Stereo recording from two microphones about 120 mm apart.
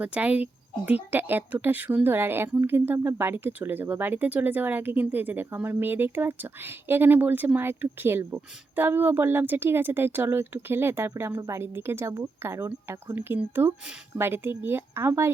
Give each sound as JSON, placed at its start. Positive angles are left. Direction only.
{"t": 0.0, "sound": "speech", "side_deg": -10}